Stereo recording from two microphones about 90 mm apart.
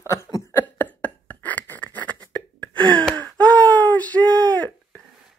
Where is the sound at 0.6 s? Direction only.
20° left (ahead or behind).